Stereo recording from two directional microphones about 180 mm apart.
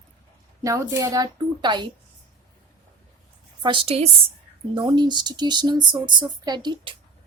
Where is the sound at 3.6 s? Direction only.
25° right (ahead or behind).